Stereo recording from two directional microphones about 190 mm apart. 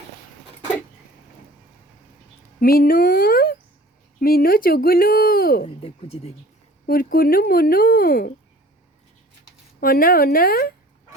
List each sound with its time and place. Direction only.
2.6 s speech: 50° left (ahead or behind)
5.6 s speech: 30° left (ahead or behind)
6.8 s speech: 50° left (ahead or behind)
9.8 s speech: 50° left (ahead or behind)